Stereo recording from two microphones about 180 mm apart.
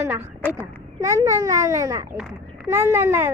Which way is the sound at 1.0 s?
15° right (ahead or behind).